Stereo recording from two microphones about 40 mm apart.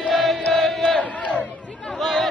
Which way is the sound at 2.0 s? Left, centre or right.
Centre.